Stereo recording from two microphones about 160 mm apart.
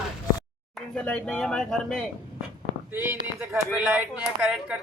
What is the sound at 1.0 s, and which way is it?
Speech, 5° left (ahead or behind).